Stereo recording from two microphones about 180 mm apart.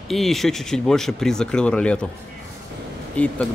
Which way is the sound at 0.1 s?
Centre (ahead or behind).